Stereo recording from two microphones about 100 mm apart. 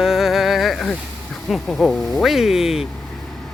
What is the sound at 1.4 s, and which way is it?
Speech, 5° left (ahead or behind).